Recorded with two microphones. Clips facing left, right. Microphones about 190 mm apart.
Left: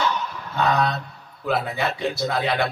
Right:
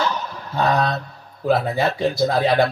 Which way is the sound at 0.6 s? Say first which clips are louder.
Right 2 dB; 35° right (ahead or behind).